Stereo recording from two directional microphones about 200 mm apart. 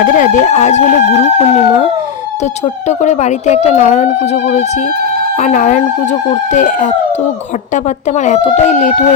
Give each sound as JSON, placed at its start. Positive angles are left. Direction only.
{"t": 0.0, "sound": "speech", "side_deg": 40}
{"t": 3.0, "sound": "speech", "side_deg": 35}
{"t": 5.4, "sound": "speech", "side_deg": 40}
{"t": 8.6, "sound": "speech", "side_deg": 35}